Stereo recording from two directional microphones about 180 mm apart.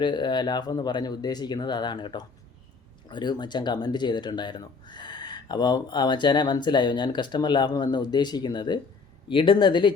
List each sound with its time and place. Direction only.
0.0 s speech: 25° left (ahead or behind)